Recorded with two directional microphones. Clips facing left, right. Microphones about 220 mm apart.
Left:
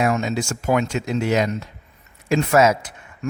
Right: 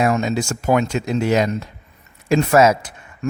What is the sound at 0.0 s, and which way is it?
Speech, 35° right (ahead or behind).